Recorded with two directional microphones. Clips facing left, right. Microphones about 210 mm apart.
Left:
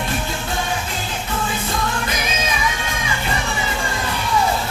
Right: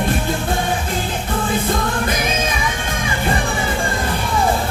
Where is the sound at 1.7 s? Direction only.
50° right (ahead or behind).